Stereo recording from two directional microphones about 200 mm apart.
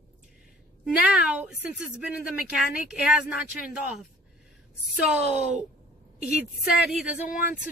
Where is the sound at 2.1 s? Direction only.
5° right (ahead or behind).